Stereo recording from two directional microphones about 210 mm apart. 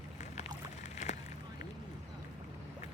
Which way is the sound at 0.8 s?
35° left (ahead or behind).